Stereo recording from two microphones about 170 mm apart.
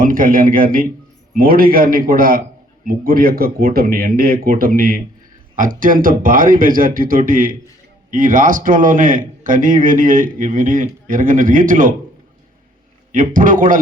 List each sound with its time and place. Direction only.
0.0 s a man's voice: 55° right (ahead or behind)
13.1 s a man's voice: 50° right (ahead or behind)